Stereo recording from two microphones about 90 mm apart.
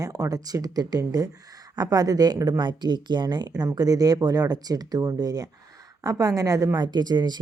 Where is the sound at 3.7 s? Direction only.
45° right (ahead or behind).